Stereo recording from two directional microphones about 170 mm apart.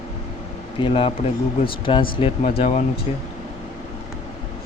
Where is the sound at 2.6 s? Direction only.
40° left (ahead or behind).